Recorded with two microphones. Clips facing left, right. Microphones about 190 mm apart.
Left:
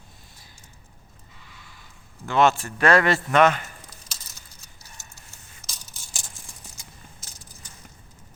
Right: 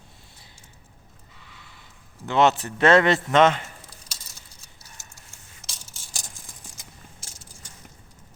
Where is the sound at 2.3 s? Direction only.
20° right (ahead or behind).